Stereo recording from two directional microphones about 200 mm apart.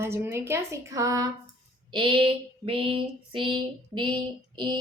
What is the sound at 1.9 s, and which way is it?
Female singing, 25° right (ahead or behind).